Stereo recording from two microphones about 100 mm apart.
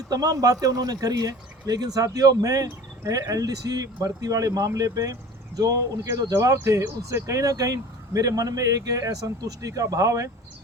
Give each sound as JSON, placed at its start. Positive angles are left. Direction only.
{"t": 0.1, "sound": "speech", "side_deg": -40}